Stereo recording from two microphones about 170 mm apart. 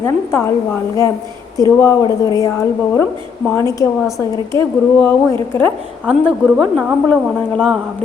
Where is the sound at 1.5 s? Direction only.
20° left (ahead or behind).